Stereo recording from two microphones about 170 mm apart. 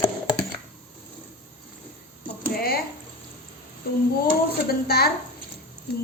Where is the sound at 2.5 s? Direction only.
65° left (ahead or behind).